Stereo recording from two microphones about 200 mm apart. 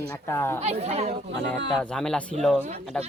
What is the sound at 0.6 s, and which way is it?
Speech, 30° right (ahead or behind).